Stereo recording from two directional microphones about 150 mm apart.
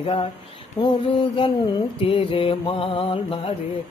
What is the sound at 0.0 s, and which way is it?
Mantra, 35° left (ahead or behind).